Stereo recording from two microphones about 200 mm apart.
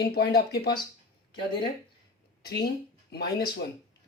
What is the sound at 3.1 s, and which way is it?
Speech, 55° left (ahead or behind).